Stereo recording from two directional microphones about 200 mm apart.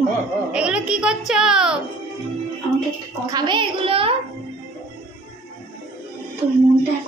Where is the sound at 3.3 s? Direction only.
20° right (ahead or behind).